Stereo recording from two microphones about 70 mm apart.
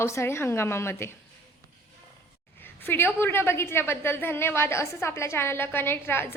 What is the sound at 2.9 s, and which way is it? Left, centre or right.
A woman's voice, left.